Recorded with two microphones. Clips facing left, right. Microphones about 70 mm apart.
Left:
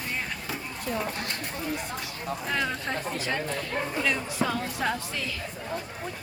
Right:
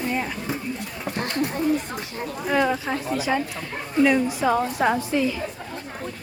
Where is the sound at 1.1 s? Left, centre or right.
Right.